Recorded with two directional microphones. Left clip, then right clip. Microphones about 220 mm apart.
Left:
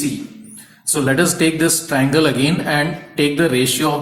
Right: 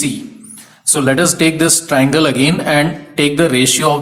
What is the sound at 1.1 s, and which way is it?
Speech, 25° right (ahead or behind).